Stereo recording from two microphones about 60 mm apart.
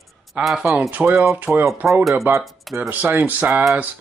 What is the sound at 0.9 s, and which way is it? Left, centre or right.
Speech, right.